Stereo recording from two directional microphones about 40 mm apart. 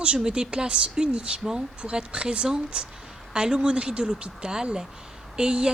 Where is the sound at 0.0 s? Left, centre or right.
Right.